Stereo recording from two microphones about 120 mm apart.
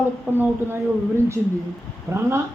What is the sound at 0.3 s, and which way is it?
A man's voice, 20° right (ahead or behind).